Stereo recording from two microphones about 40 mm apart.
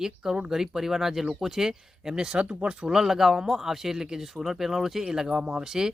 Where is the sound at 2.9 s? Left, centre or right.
Centre.